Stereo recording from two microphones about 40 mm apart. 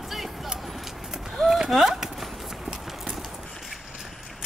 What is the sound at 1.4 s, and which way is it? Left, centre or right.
Horse, centre.